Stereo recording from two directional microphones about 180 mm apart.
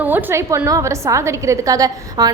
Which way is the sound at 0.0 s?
10° right (ahead or behind).